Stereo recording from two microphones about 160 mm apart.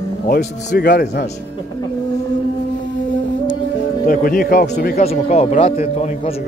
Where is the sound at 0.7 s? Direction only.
85° left.